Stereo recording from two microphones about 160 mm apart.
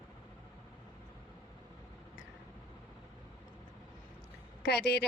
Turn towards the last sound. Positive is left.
turn(degrees=90)